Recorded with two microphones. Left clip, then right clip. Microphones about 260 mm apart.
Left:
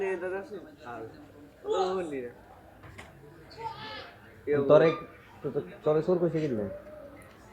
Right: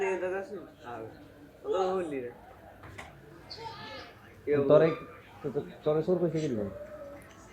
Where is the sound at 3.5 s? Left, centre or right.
Centre.